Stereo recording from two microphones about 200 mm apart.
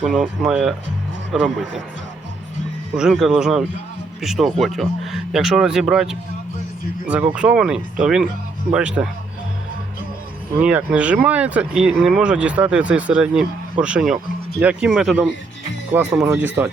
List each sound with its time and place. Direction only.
0.0 s speech: 5° right (ahead or behind)
2.9 s speech: 5° right (ahead or behind)
7.3 s speech: 5° right (ahead or behind)
10.6 s speech: 5° right (ahead or behind)